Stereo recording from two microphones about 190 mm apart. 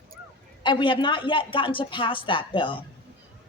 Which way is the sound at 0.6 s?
25° left (ahead or behind).